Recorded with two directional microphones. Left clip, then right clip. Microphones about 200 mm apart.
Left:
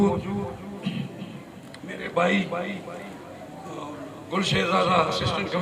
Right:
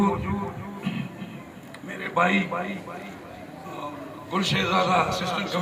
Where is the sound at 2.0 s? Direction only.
30° left (ahead or behind).